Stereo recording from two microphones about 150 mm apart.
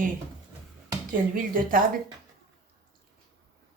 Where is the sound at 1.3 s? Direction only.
65° right (ahead or behind).